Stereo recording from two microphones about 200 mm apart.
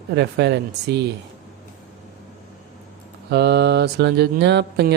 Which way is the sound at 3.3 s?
55° right (ahead or behind).